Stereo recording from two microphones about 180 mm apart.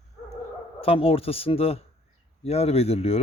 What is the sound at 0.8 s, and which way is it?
Speech, 30° left (ahead or behind).